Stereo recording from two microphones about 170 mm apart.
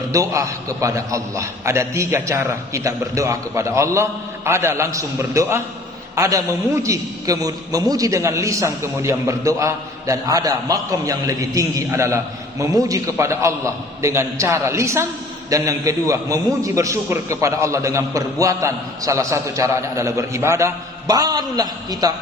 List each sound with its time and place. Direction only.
0.1 s a man's voice: 20° right (ahead or behind)